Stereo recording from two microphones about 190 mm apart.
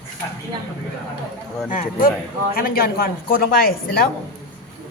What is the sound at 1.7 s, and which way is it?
A woman's voice, 45° left (ahead or behind).